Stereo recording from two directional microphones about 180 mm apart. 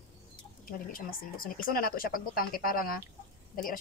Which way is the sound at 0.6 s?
50° left (ahead or behind).